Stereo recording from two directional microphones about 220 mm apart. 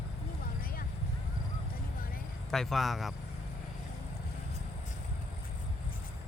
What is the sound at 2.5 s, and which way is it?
Speech, centre (ahead or behind).